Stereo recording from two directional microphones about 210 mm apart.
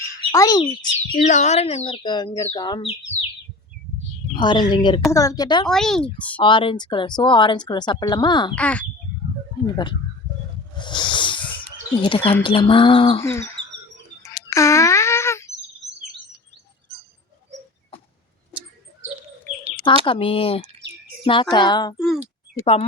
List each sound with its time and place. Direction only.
0.3 s speech: 15° left (ahead or behind)
1.1 s speech: 35° left (ahead or behind); by 3.2 s 20° left (ahead or behind)
4.4 s a woman's voice: 20° left (ahead or behind)
5.6 s a woman's voice: centre (ahead or behind)
6.4 s speech: 25° left (ahead or behind)
8.5 s speech: 5° left (ahead or behind)
9.6 s speech: 20° left (ahead or behind)
10.8 s a sound: 20° left (ahead or behind)
12.0 s speech: 25° left (ahead or behind)
13.2 s a woman's voice: 10° left (ahead or behind)
14.2 s a sound: 15° left (ahead or behind)
20.1 s speech: 25° left (ahead or behind)
21.9 s speech: centre (ahead or behind)
22.6 s speech: 25° left (ahead or behind)